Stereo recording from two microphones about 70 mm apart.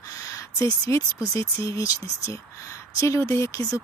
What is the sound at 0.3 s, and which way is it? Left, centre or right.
Speech, left.